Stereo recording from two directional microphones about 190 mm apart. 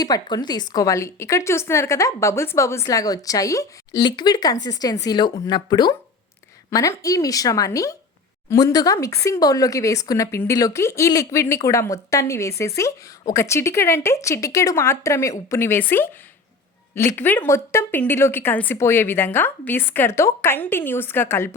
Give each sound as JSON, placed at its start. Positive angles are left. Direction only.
{"t": 0.0, "sound": "a woman's voice", "side_deg": 20}